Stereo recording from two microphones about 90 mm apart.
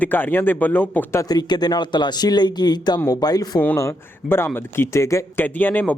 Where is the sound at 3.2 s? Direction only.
45° left (ahead or behind).